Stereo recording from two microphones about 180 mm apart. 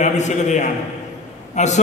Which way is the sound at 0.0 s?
40° left (ahead or behind).